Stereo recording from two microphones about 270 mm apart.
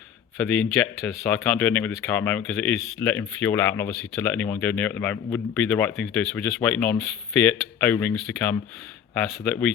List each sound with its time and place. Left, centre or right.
0.3 s speech: centre